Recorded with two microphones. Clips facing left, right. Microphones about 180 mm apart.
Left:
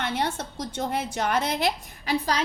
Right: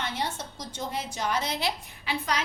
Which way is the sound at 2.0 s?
40° left (ahead or behind).